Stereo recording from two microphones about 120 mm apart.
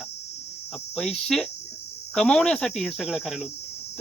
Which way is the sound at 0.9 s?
5° left (ahead or behind).